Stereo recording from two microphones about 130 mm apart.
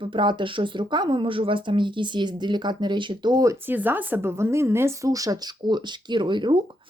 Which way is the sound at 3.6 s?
15° right (ahead or behind).